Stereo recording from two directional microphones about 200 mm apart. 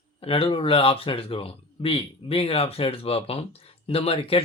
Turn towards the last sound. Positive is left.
turn(degrees=30)  # may be behind; listen again after turning